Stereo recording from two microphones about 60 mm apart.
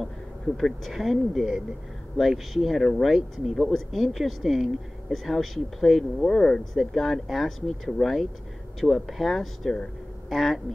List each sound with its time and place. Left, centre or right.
0.6 s speech: centre